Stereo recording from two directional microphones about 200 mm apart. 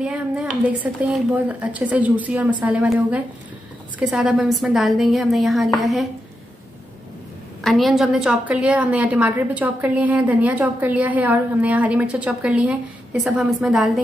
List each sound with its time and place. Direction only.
0.0 s a woman's voice: 5° right (ahead or behind)
7.6 s a woman's voice: centre (ahead or behind)